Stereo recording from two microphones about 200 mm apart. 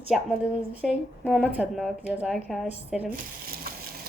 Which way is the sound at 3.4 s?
45° right (ahead or behind).